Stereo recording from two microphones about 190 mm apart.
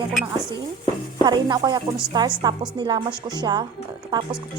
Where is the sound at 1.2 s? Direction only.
20° right (ahead or behind).